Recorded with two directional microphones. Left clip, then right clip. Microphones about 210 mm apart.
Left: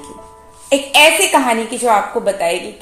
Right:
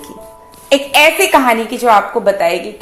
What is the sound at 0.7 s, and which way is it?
A woman's voice, 20° right (ahead or behind).